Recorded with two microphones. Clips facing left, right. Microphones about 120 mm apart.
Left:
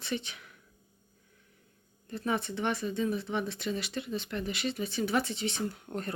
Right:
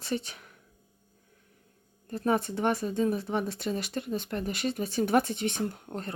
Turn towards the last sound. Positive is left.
turn(degrees=-25)  # may be behind; listen again after turning